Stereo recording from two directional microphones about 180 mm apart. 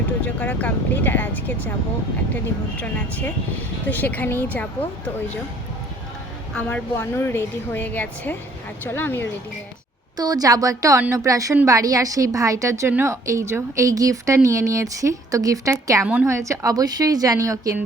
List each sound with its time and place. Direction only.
0.3 s a woman's voice: 10° left (ahead or behind)
2.8 s a woman's voice: 10° left (ahead or behind)
6.5 s a woman's voice: 10° left (ahead or behind)
10.2 s a woman's voice: 20° right (ahead or behind)